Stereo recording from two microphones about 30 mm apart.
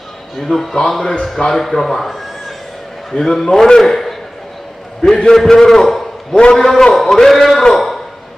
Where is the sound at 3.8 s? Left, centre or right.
Centre.